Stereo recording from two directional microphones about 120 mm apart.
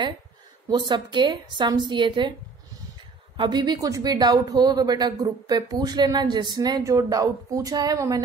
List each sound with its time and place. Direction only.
0.7 s speech: 40° right (ahead or behind)
3.3 s speech: 40° right (ahead or behind)